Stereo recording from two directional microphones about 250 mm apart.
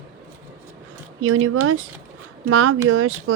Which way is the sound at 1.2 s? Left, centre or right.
Right.